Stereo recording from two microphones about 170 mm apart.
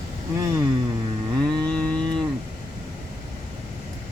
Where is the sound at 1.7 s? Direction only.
5° left (ahead or behind).